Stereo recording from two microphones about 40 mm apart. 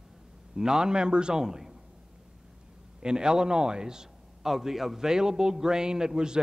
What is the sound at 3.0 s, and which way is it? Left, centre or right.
A man's voice, centre.